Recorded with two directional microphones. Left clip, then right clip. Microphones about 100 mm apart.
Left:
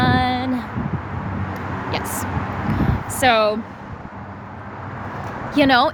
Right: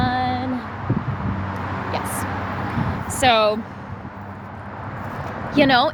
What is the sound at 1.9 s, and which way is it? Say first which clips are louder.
Vehicle: left 1 dB; 55° left (ahead or behind).